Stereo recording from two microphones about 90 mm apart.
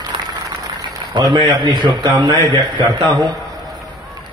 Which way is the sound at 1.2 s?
55° right (ahead or behind).